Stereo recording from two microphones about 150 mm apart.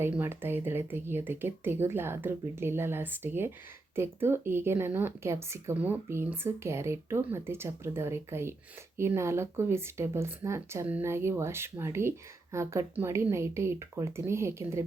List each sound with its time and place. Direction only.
0.0 s speech: 15° right (ahead or behind)